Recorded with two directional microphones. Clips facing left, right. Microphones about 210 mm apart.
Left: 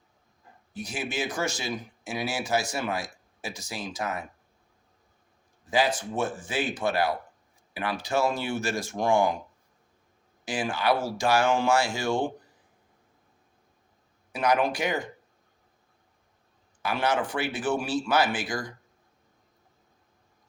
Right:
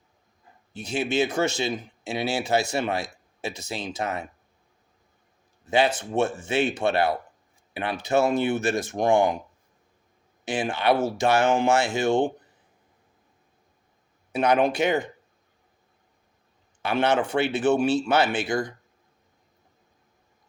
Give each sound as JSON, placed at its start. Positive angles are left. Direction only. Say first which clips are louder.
{"t": 0.7, "sound": "speech", "louder": "right 7 dB", "side_deg": -25}
{"t": 5.6, "sound": "speech", "louder": "right 3 dB", "side_deg": -25}
{"t": 10.4, "sound": "speech", "louder": "right 3 dB", "side_deg": -25}
{"t": 14.3, "sound": "speech", "louder": "right 4 dB", "side_deg": -25}
{"t": 16.8, "sound": "speech", "louder": "right 4 dB", "side_deg": -25}